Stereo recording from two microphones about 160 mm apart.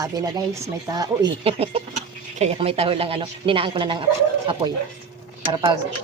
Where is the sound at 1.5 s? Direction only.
35° right (ahead or behind).